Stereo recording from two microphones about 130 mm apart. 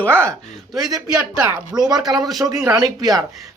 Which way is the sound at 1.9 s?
30° right (ahead or behind).